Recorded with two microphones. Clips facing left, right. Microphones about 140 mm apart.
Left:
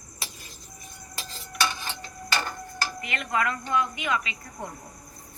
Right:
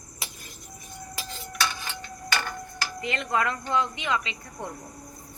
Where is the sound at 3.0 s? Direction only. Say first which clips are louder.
Right 2 dB; 30° right (ahead or behind).